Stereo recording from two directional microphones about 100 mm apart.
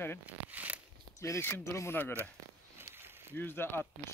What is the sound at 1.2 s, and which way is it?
Speech, 25° left (ahead or behind).